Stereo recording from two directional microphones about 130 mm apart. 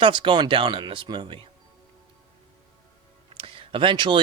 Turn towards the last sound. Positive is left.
turn(degrees=-40)  # may be behind; listen again after turning